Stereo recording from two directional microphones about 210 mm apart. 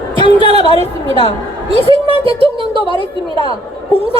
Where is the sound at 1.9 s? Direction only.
25° right (ahead or behind).